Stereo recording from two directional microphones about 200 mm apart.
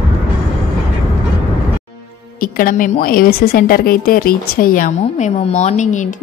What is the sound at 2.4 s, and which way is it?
A woman's voice, 45° left (ahead or behind).